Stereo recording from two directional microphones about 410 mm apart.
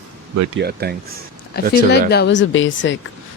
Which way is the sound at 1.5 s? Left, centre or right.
Left.